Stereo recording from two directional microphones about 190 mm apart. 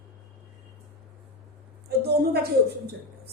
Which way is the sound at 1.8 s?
55° right (ahead or behind).